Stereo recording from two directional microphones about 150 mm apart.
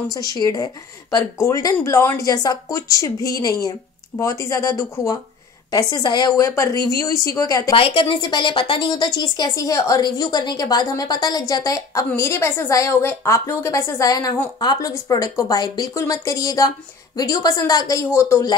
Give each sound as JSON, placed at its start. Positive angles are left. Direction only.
{"t": 0.1, "sound": "a woman's voice", "side_deg": 25}
{"t": 7.7, "sound": "a woman's voice", "side_deg": 35}